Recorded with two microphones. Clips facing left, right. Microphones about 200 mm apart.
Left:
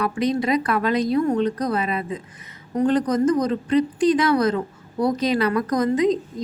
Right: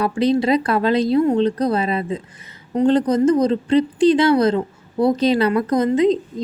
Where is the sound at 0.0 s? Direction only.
30° right (ahead or behind).